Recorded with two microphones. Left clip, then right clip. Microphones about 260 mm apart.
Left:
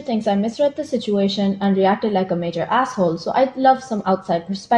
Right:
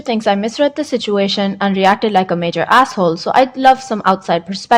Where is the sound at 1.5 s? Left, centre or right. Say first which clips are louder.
Right 5 dB; right.